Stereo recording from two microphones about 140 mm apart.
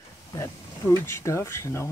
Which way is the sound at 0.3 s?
20° left (ahead or behind).